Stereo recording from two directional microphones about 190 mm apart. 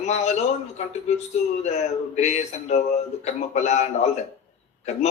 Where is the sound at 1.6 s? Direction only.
35° left (ahead or behind).